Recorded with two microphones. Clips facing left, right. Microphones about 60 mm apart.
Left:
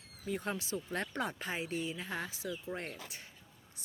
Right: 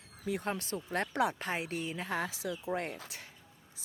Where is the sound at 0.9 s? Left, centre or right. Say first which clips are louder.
Right 7 dB; right.